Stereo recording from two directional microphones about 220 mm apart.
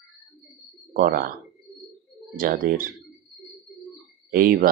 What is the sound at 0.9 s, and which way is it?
Speech, 40° right (ahead or behind).